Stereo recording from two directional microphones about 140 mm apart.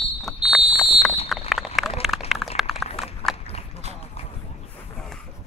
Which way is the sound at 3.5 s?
50° left (ahead or behind).